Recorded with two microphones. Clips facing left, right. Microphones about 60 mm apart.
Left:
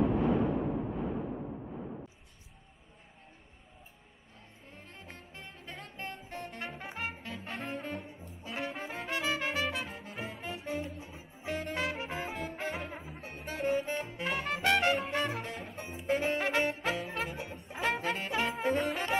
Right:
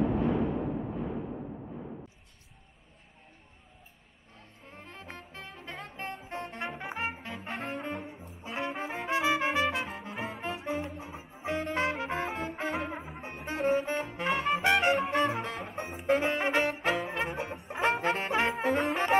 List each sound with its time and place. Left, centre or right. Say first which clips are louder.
4.6 s music: right 5 dB; right
6.2 s music: right 4 dB; right
7.4 s saxophone: right 3 dB; right
8.5 s music: right 4 dB; right
13.5 s saxophone: right 4 dB; right
14.2 s music: right 4 dB; right
18.6 s brass instrument: right 3 dB; right